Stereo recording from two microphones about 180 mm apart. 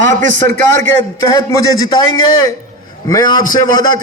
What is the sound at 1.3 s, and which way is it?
A man's voice, 25° left (ahead or behind).